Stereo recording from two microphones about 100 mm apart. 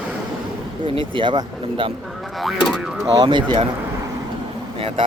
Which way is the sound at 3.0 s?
45° right (ahead or behind).